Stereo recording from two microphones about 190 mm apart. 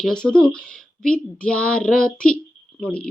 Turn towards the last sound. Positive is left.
turn(degrees=5)  # may be behind; listen again after turning